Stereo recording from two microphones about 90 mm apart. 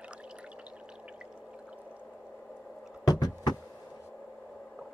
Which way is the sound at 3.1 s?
45° left (ahead or behind).